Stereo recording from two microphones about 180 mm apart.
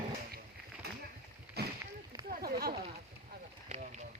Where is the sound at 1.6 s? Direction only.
60° right (ahead or behind).